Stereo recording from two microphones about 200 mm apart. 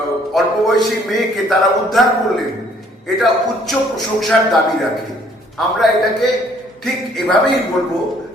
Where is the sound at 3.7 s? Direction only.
Centre (ahead or behind).